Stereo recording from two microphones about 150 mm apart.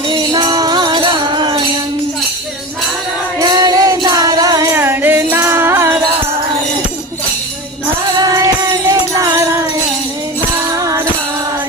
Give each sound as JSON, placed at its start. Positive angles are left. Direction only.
{"t": 0.1, "sound": "music", "side_deg": -30}
{"t": 3.4, "sound": "music", "side_deg": -25}
{"t": 8.2, "sound": "music", "side_deg": -25}
{"t": 10.7, "sound": "music", "side_deg": -20}